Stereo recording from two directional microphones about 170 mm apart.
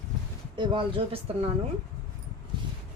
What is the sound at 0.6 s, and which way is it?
Speech, 30° right (ahead or behind).